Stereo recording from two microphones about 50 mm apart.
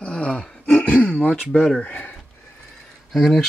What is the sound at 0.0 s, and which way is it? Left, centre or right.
Roar, left.